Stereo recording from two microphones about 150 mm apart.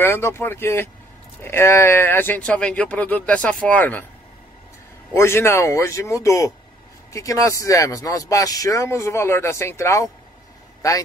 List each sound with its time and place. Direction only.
0.0 s speech: 15° left (ahead or behind)
5.1 s speech: 15° left (ahead or behind)